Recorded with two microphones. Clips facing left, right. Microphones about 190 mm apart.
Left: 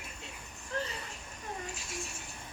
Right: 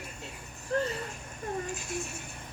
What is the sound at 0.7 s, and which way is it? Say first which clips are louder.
Speech: right 7 dB; 40° right (ahead or behind).